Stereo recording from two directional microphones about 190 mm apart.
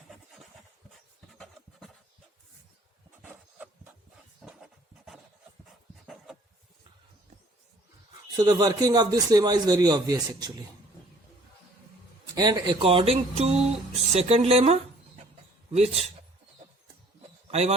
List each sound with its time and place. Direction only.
1.3 s filing: centre (ahead or behind)
4.4 s writing: centre (ahead or behind)
8.4 s a man's voice: 20° right (ahead or behind)
12.3 s a man's voice: 20° right (ahead or behind)
17.5 s speech: 35° right (ahead or behind)